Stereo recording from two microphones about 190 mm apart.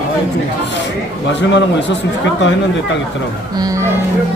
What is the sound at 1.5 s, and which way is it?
Speech, 70° left (ahead or behind).